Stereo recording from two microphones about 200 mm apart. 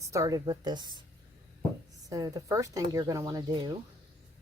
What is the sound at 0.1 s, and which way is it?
Speech, 15° right (ahead or behind).